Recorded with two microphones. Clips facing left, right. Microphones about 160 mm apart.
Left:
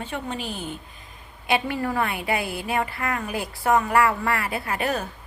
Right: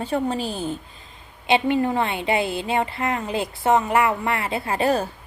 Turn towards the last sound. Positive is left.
turn(degrees=-30)  # may be behind; listen again after turning